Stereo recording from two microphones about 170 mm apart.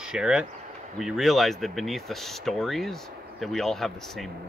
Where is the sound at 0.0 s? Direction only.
5° right (ahead or behind).